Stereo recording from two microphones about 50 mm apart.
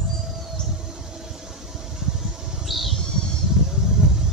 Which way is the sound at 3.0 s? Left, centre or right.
Centre.